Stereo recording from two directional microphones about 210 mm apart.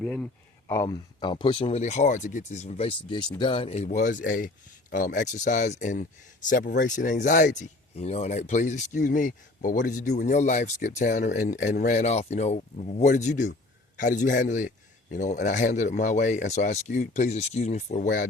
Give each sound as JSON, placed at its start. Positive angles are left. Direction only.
{"t": 0.0, "sound": "speech", "side_deg": 5}
{"t": 0.7, "sound": "speech", "side_deg": 15}